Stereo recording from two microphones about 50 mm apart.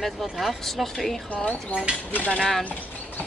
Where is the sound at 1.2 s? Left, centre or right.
Left.